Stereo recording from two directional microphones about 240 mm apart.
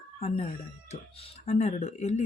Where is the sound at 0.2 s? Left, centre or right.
Left.